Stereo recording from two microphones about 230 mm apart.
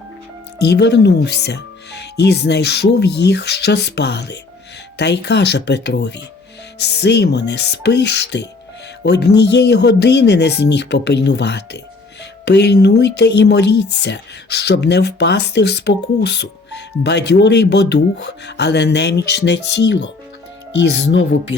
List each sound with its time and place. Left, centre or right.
0.6 s speech: left